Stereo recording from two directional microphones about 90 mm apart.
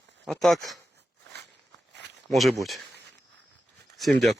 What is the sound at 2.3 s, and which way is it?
Speech, centre (ahead or behind).